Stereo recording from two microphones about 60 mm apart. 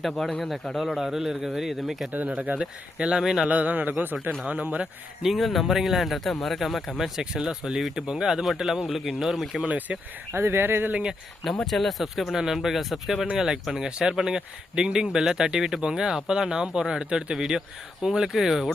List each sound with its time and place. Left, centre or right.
0.0 s speech: centre
2.1 s a man's voice: right; by 3.5 s centre
3.5 s a man's voice: right
5.2 s speech: centre
9.6 s a man's voice: right
10.3 s speech: right
11.6 s speech: centre